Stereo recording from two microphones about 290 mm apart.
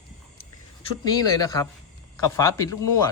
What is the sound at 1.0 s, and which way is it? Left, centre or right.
Speech, centre.